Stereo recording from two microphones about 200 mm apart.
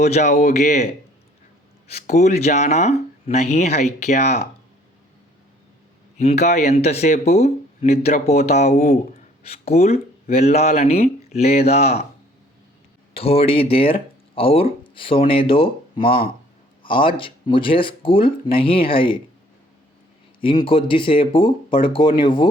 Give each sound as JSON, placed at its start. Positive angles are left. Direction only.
{"t": 0.0, "sound": "speech", "side_deg": 35}
{"t": 2.1, "sound": "speech", "side_deg": 35}
{"t": 6.1, "sound": "speech", "side_deg": 35}
{"t": 13.1, "sound": "speech", "side_deg": 30}
{"t": 20.7, "sound": "speech", "side_deg": 25}